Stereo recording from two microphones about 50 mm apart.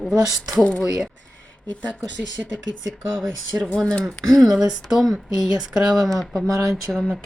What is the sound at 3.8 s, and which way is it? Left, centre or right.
Speech, centre.